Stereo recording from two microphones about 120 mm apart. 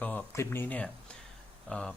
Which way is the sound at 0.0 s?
10° left (ahead or behind).